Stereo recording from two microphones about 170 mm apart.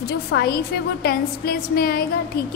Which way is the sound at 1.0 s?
65° left (ahead or behind).